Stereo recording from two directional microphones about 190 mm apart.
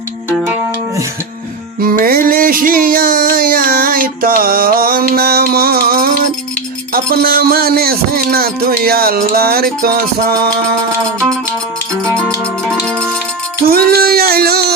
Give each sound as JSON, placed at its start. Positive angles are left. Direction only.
{"t": 1.8, "sound": "music", "side_deg": -50}
{"t": 13.7, "sound": "singing", "side_deg": -50}